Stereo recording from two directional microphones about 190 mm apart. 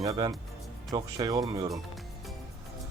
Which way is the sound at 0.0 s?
20° right (ahead or behind).